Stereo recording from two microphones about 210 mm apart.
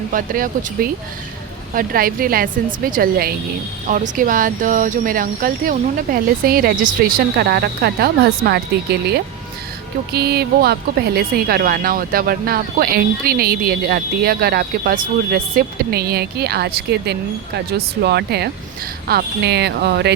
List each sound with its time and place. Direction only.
0.1 s a woman's voice: 40° right (ahead or behind)